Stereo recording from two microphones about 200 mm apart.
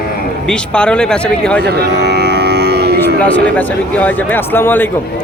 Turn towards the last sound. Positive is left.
turn(degrees=10)  # may be behind; listen again after turning